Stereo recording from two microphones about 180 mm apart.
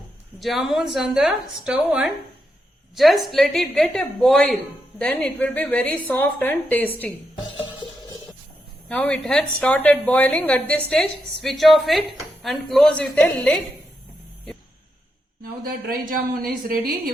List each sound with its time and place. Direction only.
0.3 s a woman's voice: centre (ahead or behind)
8.9 s a woman's voice: 5° left (ahead or behind)
15.6 s speech: 55° right (ahead or behind)